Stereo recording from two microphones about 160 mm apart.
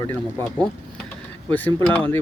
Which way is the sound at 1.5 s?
10° left (ahead or behind).